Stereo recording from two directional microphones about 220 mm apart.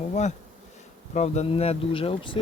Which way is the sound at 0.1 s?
30° left (ahead or behind).